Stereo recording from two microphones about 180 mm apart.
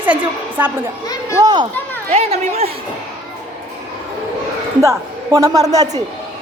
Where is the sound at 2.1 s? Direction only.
35° right (ahead or behind).